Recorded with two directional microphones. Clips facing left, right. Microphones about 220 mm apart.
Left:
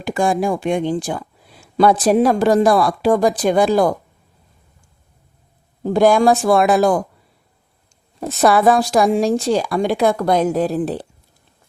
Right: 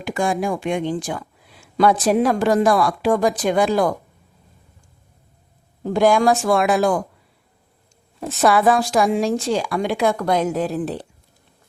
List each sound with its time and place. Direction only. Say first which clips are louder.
0.0 s speech: left 3 dB; 35° left (ahead or behind)
5.9 s speech: left 3 dB; 35° left (ahead or behind)
8.2 s speech: left 2 dB; 40° left (ahead or behind)